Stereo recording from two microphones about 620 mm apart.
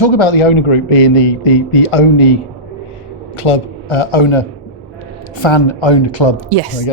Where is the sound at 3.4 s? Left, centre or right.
Left.